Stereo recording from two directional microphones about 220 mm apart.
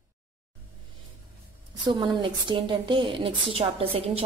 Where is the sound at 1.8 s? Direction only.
20° right (ahead or behind).